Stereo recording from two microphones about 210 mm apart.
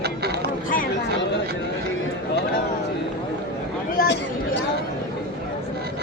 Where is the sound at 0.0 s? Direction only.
50° right (ahead or behind).